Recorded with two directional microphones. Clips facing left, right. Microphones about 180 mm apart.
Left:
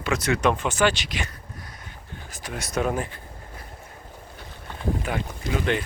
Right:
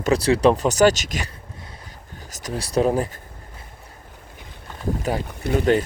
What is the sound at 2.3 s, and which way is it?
Speech, 40° right (ahead or behind).